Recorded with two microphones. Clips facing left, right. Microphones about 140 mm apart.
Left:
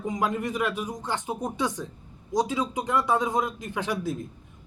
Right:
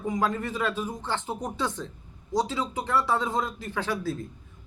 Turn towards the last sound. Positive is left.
turn(degrees=20)  # may be behind; listen again after turning